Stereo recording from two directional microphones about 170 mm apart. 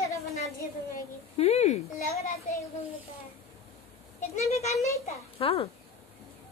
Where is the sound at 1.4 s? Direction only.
40° left (ahead or behind).